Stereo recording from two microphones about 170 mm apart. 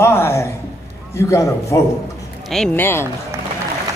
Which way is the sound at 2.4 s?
5° left (ahead or behind).